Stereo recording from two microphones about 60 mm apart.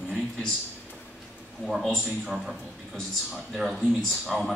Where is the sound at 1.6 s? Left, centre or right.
Centre.